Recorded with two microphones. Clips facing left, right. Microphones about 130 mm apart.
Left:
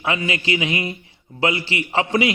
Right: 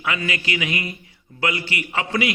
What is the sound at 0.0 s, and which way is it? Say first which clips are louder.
A man's voice: left 3 dB; 25° left (ahead or behind).